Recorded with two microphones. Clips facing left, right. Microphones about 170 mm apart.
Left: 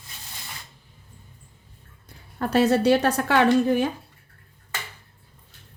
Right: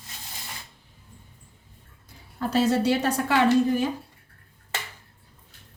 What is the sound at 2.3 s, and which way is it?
A woman's voice, 60° left (ahead or behind).